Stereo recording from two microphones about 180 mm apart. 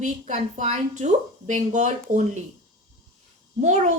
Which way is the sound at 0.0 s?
40° right (ahead or behind).